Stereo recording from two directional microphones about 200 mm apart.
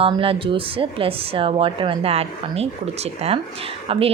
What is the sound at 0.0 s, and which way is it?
Speech, 25° right (ahead or behind).